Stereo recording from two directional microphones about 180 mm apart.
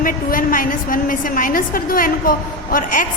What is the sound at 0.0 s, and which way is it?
A woman's voice, 50° left (ahead or behind).